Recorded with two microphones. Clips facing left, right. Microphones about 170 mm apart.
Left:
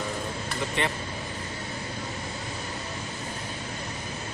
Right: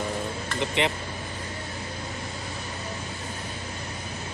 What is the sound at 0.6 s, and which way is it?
Speech, 20° right (ahead or behind).